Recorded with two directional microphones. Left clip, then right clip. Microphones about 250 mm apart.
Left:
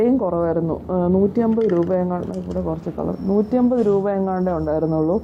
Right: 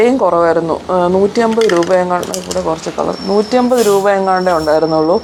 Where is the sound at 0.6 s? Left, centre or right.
Right.